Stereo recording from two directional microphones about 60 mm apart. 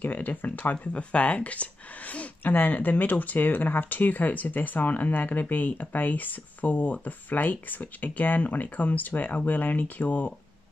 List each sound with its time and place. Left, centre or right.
0.0 s speech: left